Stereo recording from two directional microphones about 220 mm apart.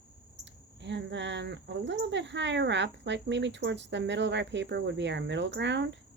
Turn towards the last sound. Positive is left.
turn(degrees=-55)  # may be behind; listen again after turning